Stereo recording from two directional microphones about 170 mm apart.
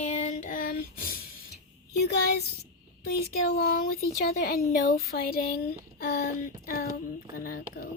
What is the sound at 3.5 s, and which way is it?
Speech, 60° left (ahead or behind).